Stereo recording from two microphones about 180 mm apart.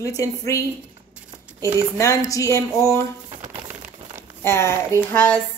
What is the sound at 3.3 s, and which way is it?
Crumpling, 40° right (ahead or behind).